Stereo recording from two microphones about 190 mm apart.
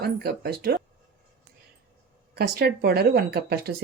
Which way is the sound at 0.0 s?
55° right (ahead or behind).